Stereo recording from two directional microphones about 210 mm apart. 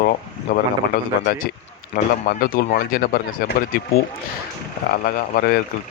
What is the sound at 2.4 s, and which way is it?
Speech, 45° left (ahead or behind).